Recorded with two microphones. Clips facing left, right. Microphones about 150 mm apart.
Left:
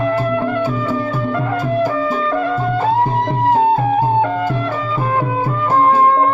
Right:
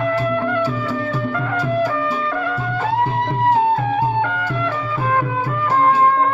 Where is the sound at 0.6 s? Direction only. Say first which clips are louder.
Left 2 dB; 50° left (ahead or behind).